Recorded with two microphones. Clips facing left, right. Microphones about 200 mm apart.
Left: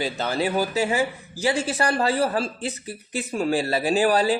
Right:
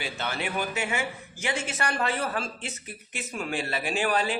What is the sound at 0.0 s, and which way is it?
Speech, 35° left (ahead or behind).